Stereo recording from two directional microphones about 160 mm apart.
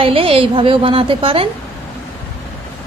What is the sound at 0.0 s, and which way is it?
Speech, 35° right (ahead or behind).